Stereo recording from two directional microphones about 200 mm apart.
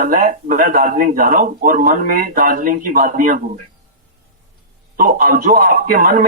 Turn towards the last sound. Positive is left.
turn(degrees=-45)  # may be behind; listen again after turning